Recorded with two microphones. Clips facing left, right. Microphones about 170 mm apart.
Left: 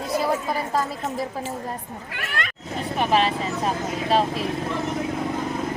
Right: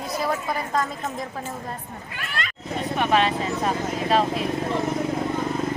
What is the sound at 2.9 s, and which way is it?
Speech, centre (ahead or behind).